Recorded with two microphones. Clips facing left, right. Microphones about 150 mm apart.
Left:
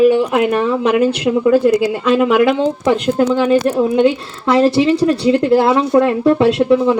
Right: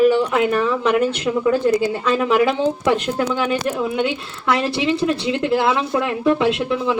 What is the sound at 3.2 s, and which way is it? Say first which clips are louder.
Speech: left 8 dB; 30° left (ahead or behind).